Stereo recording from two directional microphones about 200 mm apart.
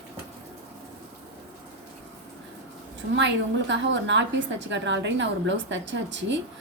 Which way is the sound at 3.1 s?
65° right (ahead or behind).